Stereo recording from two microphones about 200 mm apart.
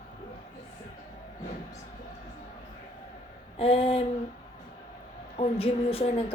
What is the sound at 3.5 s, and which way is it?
Speech, 30° left (ahead or behind).